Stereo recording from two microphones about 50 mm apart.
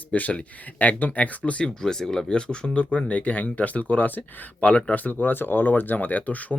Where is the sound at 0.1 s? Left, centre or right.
Left.